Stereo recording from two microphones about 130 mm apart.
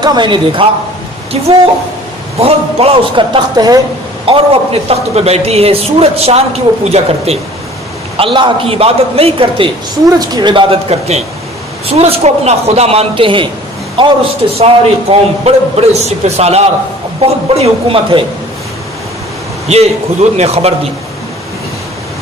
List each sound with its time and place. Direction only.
0.0 s speech: 35° right (ahead or behind)
2.3 s speech: 50° right (ahead or behind)
3.3 s speech: 30° right (ahead or behind)
4.3 s speech: 50° right (ahead or behind)
8.2 s speech: 40° right (ahead or behind)
10.0 s speech: 30° right (ahead or behind)
14.6 s speech: 50° right (ahead or behind)
19.7 s speech: 55° right (ahead or behind)